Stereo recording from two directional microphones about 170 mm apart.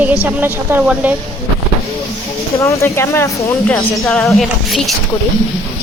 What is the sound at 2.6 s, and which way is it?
Speech, 15° left (ahead or behind).